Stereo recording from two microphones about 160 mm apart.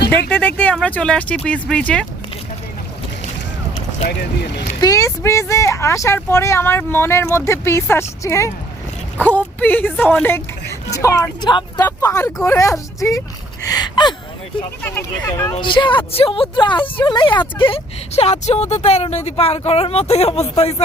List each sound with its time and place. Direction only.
0.3 s speech: 10° left (ahead or behind)
4.8 s speech: 20° left (ahead or behind)
14.8 s speech: 10° left (ahead or behind)
15.6 s speech: 30° left (ahead or behind)